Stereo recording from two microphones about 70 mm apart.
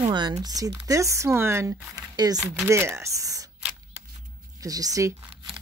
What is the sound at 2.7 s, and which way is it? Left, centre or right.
Speech, right.